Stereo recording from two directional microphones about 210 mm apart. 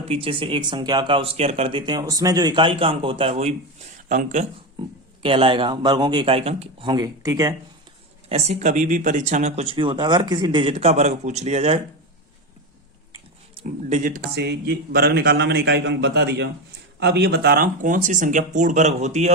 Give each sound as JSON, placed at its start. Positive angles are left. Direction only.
{"t": 0.1, "sound": "speech", "side_deg": -25}
{"t": 4.8, "sound": "speech", "side_deg": -25}
{"t": 8.3, "sound": "speech", "side_deg": -35}
{"t": 13.6, "sound": "speech", "side_deg": -35}
{"t": 14.3, "sound": "a man's voice", "side_deg": -50}